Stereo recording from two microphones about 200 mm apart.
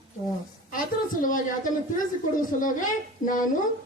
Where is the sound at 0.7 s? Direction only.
40° left (ahead or behind).